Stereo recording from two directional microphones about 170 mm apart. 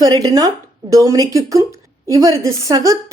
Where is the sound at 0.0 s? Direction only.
20° right (ahead or behind).